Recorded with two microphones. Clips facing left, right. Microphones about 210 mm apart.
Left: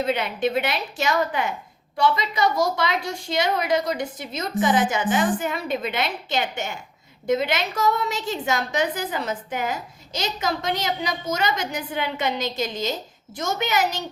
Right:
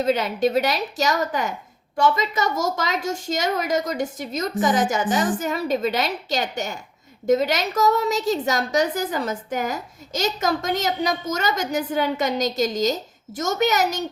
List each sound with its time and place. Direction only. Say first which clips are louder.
0.0 s a woman's voice: right 3 dB; 40° right (ahead or behind)